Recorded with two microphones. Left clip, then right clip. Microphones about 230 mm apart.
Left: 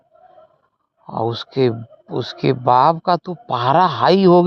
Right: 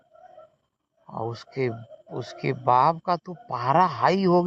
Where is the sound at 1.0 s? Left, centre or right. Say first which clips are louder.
Left 10 dB; left.